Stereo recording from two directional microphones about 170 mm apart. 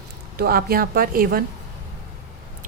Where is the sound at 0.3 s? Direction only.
60° right (ahead or behind).